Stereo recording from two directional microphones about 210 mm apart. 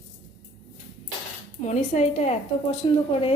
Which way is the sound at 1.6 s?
35° left (ahead or behind).